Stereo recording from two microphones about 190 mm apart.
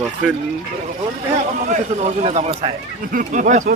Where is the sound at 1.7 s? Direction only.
35° right (ahead or behind).